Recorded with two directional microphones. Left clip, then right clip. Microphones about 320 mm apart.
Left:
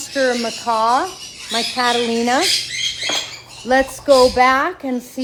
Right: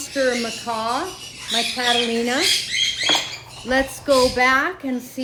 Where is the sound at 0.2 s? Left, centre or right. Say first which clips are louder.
Left 3 dB; left.